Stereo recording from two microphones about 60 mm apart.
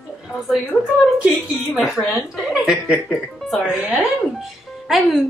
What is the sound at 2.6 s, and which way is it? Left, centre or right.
Speech, centre.